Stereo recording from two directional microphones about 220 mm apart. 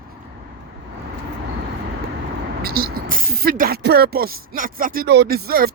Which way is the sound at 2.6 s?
45° right (ahead or behind).